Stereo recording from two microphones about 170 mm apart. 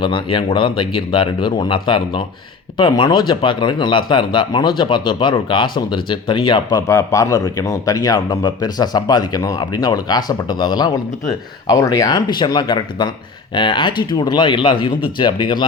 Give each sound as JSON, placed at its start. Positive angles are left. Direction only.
{"t": 0.0, "sound": "speech", "side_deg": 30}